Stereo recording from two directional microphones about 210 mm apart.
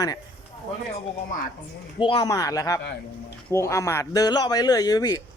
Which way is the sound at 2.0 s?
20° left (ahead or behind).